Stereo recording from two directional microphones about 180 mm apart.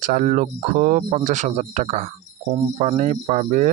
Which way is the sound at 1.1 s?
40° right (ahead or behind).